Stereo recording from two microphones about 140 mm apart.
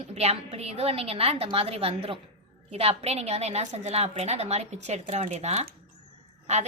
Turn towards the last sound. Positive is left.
turn(degrees=-55)  # may be behind; listen again after turning